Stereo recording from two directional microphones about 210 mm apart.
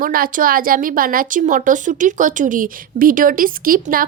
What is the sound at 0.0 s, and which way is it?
Speech, 40° right (ahead or behind).